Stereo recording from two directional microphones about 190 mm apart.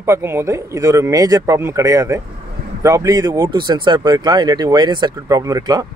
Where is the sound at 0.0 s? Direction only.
15° right (ahead or behind).